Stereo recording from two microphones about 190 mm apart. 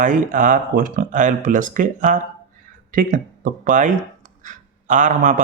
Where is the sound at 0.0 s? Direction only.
45° right (ahead or behind).